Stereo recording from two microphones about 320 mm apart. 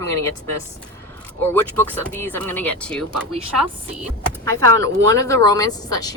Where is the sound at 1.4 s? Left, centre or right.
Centre.